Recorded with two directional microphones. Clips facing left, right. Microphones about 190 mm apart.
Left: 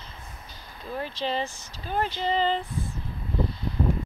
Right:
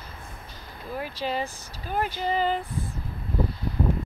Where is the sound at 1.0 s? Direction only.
10° right (ahead or behind).